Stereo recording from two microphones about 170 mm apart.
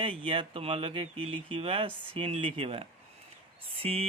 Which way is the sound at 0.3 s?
30° right (ahead or behind).